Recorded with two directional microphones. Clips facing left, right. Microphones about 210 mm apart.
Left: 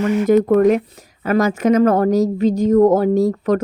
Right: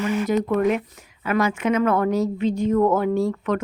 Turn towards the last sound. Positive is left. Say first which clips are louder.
# left 6 dB
turn(degrees=40)  # may be behind; listen again after turning